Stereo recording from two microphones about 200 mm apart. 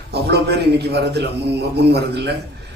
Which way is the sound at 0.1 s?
55° right (ahead or behind).